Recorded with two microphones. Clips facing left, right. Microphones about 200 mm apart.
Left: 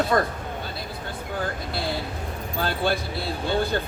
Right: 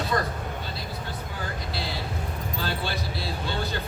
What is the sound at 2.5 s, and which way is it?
Speech, 55° left (ahead or behind).